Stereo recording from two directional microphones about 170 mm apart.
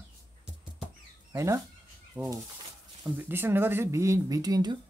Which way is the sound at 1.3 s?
15° right (ahead or behind).